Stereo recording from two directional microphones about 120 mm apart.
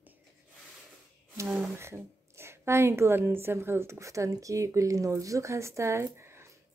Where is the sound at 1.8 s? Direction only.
20° right (ahead or behind).